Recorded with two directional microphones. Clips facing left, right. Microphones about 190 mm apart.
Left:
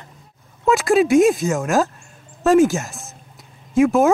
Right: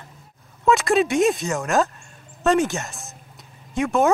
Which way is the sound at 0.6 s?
Centre (ahead or behind).